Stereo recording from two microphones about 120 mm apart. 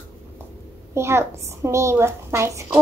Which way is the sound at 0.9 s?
20° right (ahead or behind).